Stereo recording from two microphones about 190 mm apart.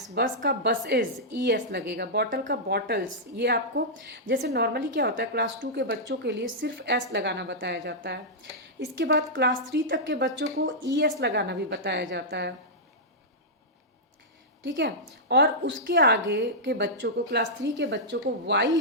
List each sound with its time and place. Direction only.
0.1 s a woman's voice: 60° right (ahead or behind)
14.6 s a woman's voice: 70° right (ahead or behind)